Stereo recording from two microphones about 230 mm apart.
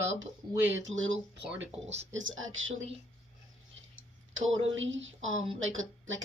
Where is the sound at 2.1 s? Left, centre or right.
Right.